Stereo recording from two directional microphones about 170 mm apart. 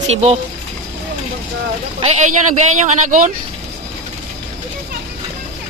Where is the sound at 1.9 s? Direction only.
40° right (ahead or behind).